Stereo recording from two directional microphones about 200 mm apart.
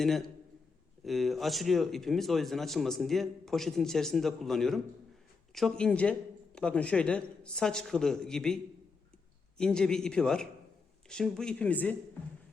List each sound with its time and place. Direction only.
0.0 s speech: centre (ahead or behind)
9.6 s speech: 5° left (ahead or behind)